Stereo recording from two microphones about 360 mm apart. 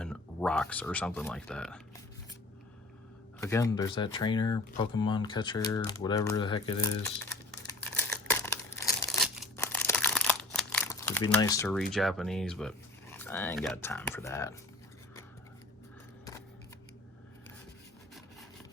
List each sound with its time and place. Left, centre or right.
0.0 s speech: centre
3.4 s speech: centre
7.9 s crumpling: centre